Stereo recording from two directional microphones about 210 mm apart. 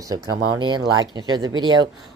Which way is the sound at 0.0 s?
15° right (ahead or behind).